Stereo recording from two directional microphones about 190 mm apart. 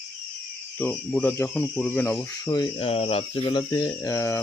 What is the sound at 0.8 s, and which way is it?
Speech, 10° left (ahead or behind).